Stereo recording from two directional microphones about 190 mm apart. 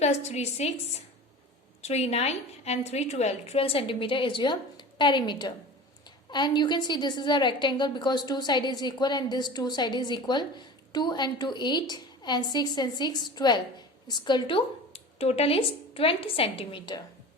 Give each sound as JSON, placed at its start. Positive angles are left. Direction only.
{"t": 0.0, "sound": "a woman's voice", "side_deg": 35}